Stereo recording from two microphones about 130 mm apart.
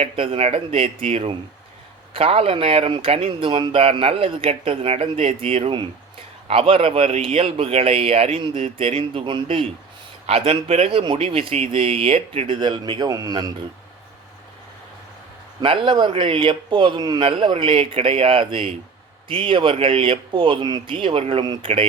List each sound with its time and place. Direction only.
0.0 s speech: 50° right (ahead or behind); by 13.5 s 30° right (ahead or behind)
15.6 s speech: 40° right (ahead or behind)
21.4 s speech: 30° right (ahead or behind)